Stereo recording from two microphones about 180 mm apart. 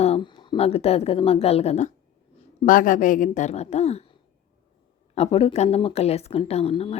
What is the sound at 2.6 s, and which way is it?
A woman's voice, 50° left (ahead or behind).